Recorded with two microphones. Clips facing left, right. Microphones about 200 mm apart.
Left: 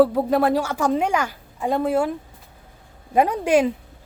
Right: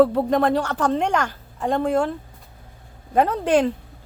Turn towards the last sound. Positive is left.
turn(degrees=10)  # may be behind; listen again after turning